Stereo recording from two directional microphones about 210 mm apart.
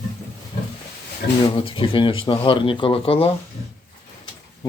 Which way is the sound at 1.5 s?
25° left (ahead or behind).